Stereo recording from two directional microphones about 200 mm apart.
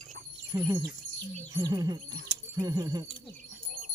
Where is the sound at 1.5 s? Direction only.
20° right (ahead or behind).